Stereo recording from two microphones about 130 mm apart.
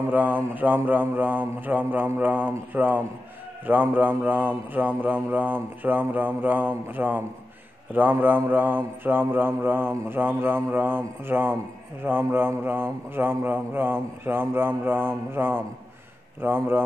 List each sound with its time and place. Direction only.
0.1 s mantra: 15° right (ahead or behind)